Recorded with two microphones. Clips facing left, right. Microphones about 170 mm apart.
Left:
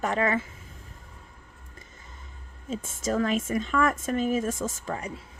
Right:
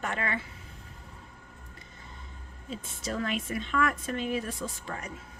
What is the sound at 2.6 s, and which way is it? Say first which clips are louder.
Speech: left 7 dB; 45° left (ahead or behind).